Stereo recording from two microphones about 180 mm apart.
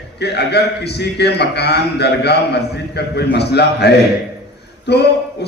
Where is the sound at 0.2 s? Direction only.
65° left (ahead or behind).